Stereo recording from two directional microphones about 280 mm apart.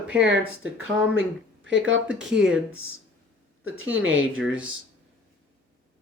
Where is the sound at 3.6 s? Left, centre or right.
Right.